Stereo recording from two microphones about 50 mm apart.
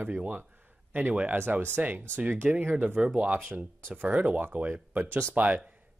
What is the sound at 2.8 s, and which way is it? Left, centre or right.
Speech, right.